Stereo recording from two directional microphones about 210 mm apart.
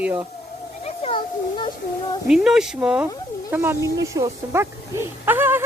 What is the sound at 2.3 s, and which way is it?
Speech, centre (ahead or behind).